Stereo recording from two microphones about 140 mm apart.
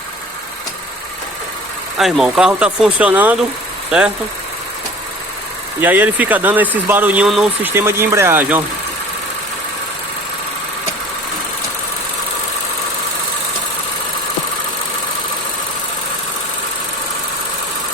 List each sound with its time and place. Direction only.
2.0 s speech: centre (ahead or behind)
5.8 s speech: 10° right (ahead or behind)
7.7 s speech: 20° right (ahead or behind)